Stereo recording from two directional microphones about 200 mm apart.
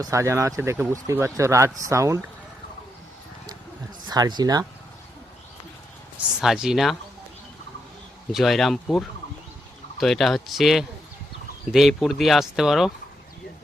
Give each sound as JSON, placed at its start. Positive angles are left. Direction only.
{"t": 0.0, "sound": "speech", "side_deg": -15}
{"t": 4.1, "sound": "speech", "side_deg": -20}
{"t": 6.4, "sound": "speech", "side_deg": 0}
{"t": 8.3, "sound": "speech", "side_deg": 0}